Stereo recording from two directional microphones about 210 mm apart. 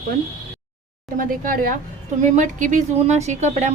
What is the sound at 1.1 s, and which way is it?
Speech, 40° right (ahead or behind).